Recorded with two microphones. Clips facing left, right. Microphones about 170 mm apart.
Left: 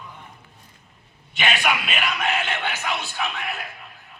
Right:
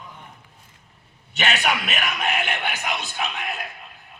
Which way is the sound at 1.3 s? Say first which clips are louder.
Even; 40° right (ahead or behind).